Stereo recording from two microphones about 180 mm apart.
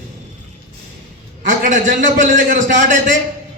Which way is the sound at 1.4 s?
45° right (ahead or behind).